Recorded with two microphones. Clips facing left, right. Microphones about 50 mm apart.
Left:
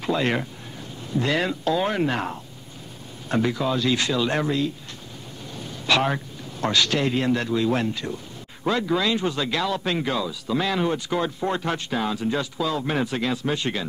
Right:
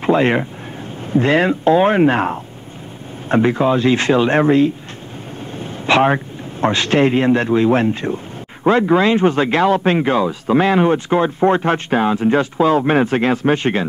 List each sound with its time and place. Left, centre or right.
0.0 s a man's voice: right